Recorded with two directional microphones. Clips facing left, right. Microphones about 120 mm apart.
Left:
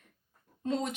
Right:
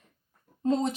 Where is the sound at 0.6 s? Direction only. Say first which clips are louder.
Right 6 dB; 35° right (ahead or behind).